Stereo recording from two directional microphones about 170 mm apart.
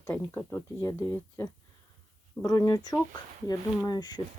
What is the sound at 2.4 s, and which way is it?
Speech, 20° left (ahead or behind).